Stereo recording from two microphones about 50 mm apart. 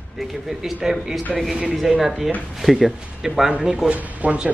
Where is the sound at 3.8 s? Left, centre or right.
Right.